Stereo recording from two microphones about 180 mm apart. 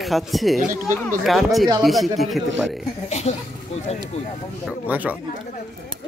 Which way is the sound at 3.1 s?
40° left (ahead or behind).